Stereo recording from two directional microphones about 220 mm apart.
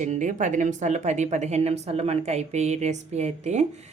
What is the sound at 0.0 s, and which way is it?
Speech, 35° right (ahead or behind).